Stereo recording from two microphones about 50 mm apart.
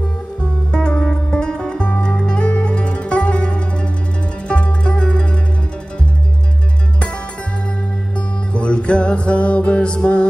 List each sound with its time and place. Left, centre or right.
0.7 s music: centre
8.5 s music: left